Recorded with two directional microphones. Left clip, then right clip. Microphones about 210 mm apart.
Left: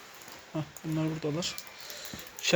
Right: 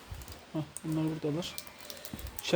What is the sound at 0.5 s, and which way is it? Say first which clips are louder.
Speech: left 1 dB; 5° right (ahead or behind).